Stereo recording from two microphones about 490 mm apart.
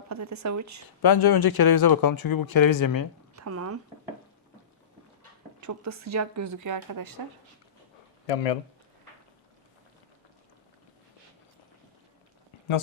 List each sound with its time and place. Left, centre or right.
0.1 s speech: right
1.0 s speech: left
3.3 s speech: right
5.5 s speech: right
8.3 s speech: left